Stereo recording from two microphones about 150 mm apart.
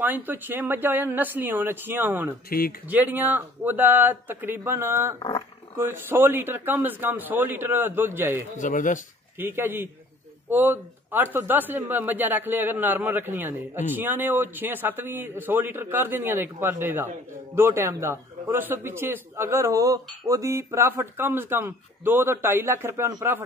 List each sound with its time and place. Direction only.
0.0 s a man's voice: 15° right (ahead or behind)
8.5 s speech: 60° left (ahead or behind)
9.4 s a man's voice: 15° right (ahead or behind)